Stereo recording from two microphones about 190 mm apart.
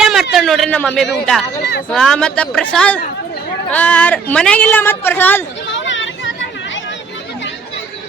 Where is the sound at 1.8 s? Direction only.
5° left (ahead or behind).